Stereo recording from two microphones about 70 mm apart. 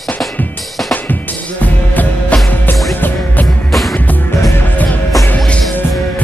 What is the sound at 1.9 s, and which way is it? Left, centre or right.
Music, left.